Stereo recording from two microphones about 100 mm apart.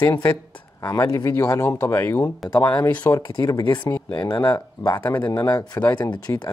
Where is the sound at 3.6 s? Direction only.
50° left (ahead or behind).